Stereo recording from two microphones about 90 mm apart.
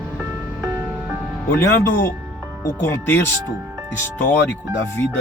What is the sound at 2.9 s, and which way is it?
Music, 25° left (ahead or behind).